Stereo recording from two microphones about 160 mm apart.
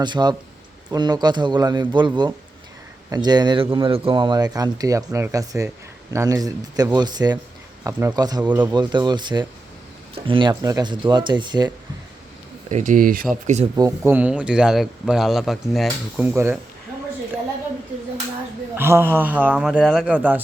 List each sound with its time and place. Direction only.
0.0 s speech: 25° right (ahead or behind)
8.4 s a man's voice: 10° right (ahead or behind)
8.7 s speech: 30° right (ahead or behind)
12.7 s speech: 50° right (ahead or behind)
13.3 s speech: 45° right (ahead or behind)
13.7 s speech: 20° right (ahead or behind); by 16.2 s centre (ahead or behind)
16.2 s a man's voice: 15° right (ahead or behind)
18.8 s a man's voice: 15° right (ahead or behind)